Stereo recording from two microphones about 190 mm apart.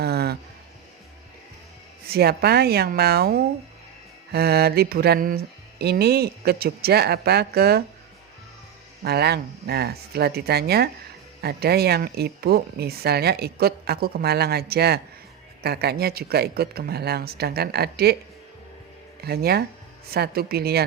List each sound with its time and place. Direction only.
0.0 s a sound: 55° right (ahead or behind)
2.0 s speech: 55° right (ahead or behind)
9.0 s speech: 60° right (ahead or behind)
19.2 s speech: 55° right (ahead or behind)